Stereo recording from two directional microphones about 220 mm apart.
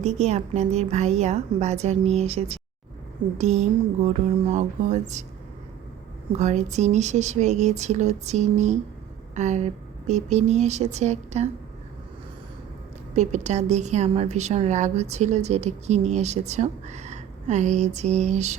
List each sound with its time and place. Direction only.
0.0 s a woman's voice: 30° right (ahead or behind)
6.3 s a woman's voice: 30° right (ahead or behind)
13.1 s a woman's voice: 30° right (ahead or behind)